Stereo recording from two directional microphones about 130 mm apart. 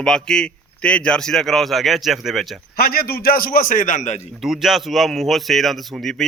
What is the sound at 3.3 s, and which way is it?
Speech, 90° left.